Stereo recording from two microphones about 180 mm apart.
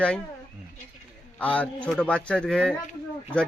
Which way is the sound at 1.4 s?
5° left (ahead or behind).